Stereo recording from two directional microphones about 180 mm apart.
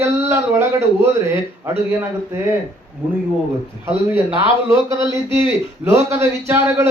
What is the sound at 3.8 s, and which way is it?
Speech, 10° right (ahead or behind).